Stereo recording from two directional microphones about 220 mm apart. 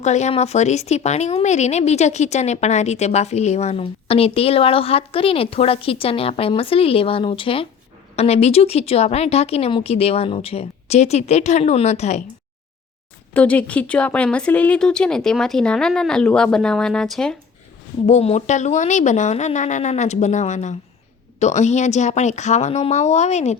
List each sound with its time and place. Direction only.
0.0 s speech: 30° left (ahead or behind)
13.3 s a woman's voice: 5° left (ahead or behind)
18.0 s a woman's voice: 30° left (ahead or behind)